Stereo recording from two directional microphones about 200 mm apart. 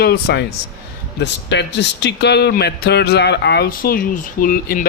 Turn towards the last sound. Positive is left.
turn(degrees=45)  # may be behind; listen again after turning